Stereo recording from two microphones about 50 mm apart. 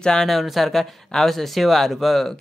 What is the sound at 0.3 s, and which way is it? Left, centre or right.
Speech, centre.